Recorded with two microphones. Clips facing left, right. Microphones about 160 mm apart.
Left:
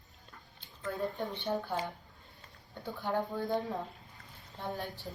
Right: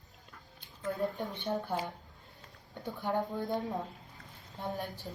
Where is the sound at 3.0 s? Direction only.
20° right (ahead or behind).